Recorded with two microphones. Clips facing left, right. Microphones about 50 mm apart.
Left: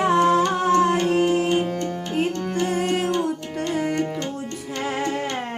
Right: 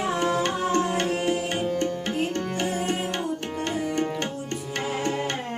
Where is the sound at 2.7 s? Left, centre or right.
Left.